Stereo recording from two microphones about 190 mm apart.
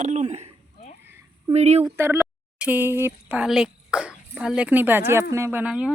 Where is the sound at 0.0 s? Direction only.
35° right (ahead or behind).